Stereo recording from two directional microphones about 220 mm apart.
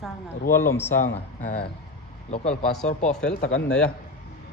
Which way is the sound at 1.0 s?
35° left (ahead or behind).